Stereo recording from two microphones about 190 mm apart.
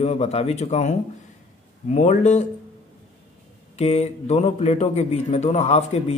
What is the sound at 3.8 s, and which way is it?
A man's voice, 35° left (ahead or behind).